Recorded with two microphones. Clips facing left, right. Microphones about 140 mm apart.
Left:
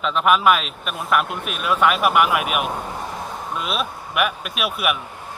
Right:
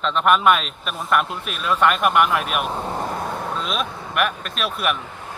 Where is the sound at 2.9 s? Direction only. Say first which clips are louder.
Right 4 dB; 60° right (ahead or behind).